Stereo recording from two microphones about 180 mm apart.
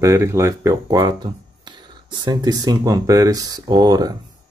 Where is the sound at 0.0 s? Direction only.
15° right (ahead or behind).